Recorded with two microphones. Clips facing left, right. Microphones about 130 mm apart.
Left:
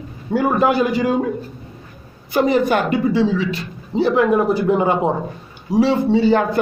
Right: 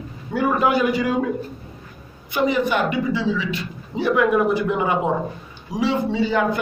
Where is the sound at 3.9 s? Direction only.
30° left (ahead or behind).